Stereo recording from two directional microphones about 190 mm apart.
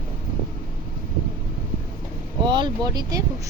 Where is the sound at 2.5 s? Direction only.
25° right (ahead or behind).